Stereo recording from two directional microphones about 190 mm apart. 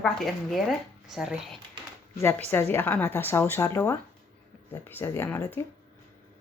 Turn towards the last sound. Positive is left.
turn(degrees=10)  # may be behind; listen again after turning